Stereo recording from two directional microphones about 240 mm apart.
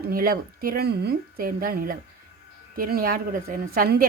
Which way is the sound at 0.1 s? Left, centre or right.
Right.